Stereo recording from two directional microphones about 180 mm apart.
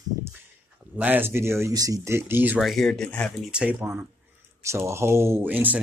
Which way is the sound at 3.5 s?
5° right (ahead or behind).